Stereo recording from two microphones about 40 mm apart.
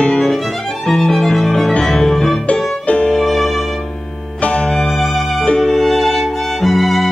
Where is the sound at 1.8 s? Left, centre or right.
Centre.